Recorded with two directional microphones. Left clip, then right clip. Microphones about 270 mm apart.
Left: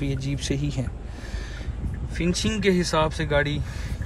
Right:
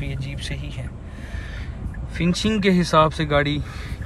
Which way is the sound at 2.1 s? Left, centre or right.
Centre.